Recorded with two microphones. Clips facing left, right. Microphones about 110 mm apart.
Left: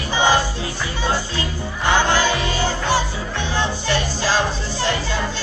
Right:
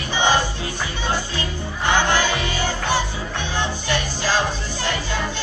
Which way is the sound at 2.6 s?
15° right (ahead or behind).